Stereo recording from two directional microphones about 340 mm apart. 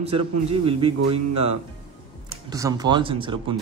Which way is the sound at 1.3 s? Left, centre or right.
Right.